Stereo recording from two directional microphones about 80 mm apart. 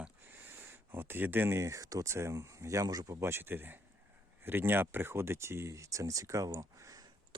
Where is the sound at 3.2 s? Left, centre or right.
Right.